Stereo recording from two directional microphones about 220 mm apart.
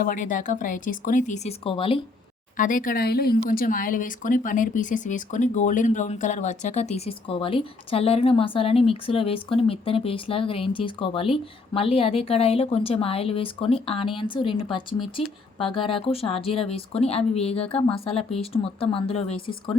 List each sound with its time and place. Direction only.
0.0 s speech: 35° left (ahead or behind)
2.6 s a woman's voice: 40° left (ahead or behind)